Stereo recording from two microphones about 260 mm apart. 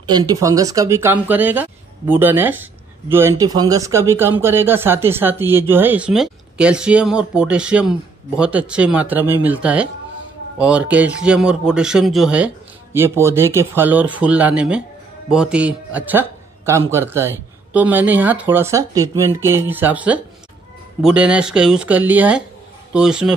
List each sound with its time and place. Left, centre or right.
0.0 s a man's voice: centre